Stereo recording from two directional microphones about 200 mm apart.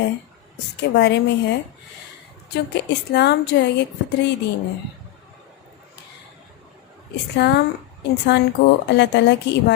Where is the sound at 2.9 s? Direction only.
55° left (ahead or behind).